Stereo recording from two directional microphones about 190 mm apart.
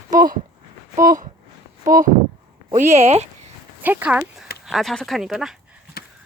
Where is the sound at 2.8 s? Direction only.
35° right (ahead or behind).